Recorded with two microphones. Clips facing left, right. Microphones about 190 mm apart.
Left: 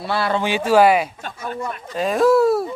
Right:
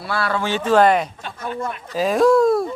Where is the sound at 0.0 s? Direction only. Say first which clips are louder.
Left 2 dB; 25° left (ahead or behind).